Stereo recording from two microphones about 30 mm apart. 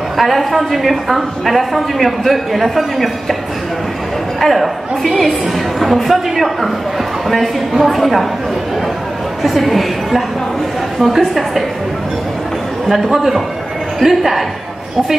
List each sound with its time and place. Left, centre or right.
0.2 s a woman's voice: centre
4.4 s a woman's voice: centre
7.8 s a woman's voice: centre
9.4 s a woman's voice: centre
12.8 s a man's voice: centre